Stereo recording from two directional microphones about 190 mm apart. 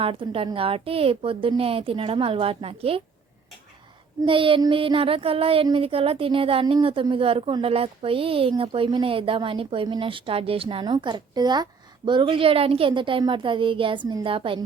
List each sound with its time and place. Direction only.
0.0 s speech: 30° right (ahead or behind)
4.2 s speech: 30° right (ahead or behind)